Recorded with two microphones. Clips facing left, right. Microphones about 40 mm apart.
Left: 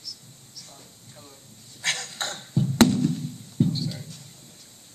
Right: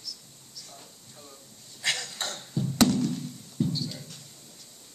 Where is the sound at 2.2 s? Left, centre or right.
Left.